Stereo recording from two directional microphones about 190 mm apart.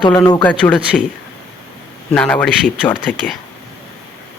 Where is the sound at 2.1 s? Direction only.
5° left (ahead or behind).